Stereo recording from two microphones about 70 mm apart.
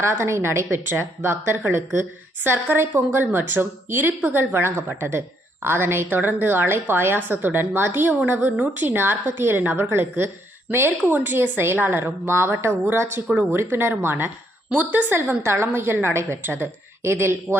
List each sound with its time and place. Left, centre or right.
0.0 s a woman's voice: right